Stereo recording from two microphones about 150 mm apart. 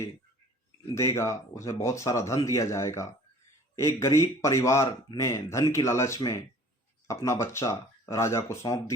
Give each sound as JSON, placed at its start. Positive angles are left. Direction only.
{"t": 0.9, "sound": "a man's voice", "side_deg": 20}